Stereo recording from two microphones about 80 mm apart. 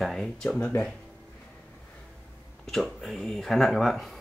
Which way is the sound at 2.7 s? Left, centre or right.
Centre.